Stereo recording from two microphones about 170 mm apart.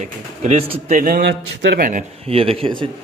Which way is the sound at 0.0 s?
45° right (ahead or behind).